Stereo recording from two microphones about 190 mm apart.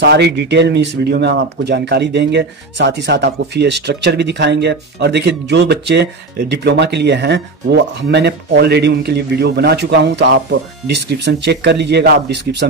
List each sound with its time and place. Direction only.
0.0 s speech: 60° right (ahead or behind)